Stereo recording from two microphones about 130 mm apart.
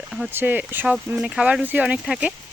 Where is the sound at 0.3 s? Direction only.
15° right (ahead or behind).